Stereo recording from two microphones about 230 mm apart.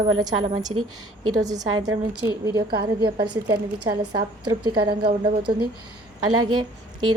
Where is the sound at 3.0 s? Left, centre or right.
Right.